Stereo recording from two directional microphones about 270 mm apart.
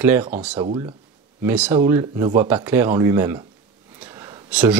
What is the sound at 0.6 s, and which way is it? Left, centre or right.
Speech, centre.